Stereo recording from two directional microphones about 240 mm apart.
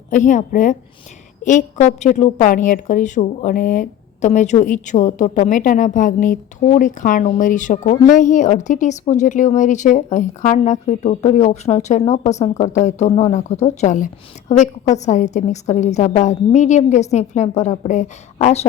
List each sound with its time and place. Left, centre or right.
0.1 s a woman's voice: left